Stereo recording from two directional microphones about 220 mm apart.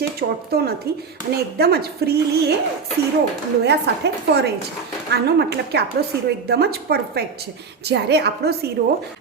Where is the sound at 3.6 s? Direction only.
50° right (ahead or behind).